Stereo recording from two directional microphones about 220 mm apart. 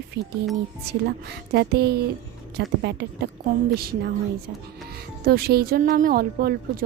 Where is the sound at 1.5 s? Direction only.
45° right (ahead or behind).